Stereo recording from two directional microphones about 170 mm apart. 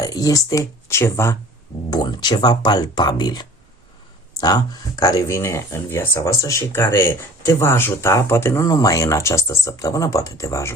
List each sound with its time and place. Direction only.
0.0 s speech: 20° left (ahead or behind)